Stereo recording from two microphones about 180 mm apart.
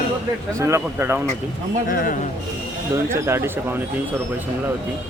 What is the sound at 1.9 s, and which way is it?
Speech, 50° left (ahead or behind).